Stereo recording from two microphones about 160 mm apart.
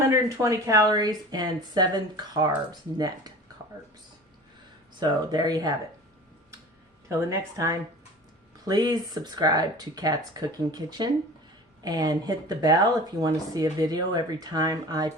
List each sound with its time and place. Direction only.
0.1 s speech: 20° right (ahead or behind)
4.9 s speech: 25° right (ahead or behind)
7.1 s speech: 20° right (ahead or behind)